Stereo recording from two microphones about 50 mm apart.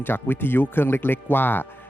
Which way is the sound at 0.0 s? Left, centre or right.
Left.